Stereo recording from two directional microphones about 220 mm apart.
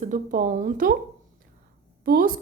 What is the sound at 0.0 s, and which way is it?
Speech, 35° right (ahead or behind).